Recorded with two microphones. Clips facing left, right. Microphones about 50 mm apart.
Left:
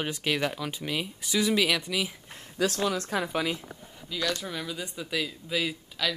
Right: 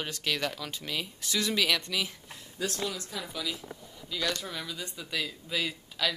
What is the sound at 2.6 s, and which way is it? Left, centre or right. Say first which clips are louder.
Speech: left 7 dB; left.